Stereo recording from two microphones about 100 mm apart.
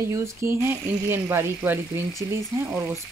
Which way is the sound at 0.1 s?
25° right (ahead or behind).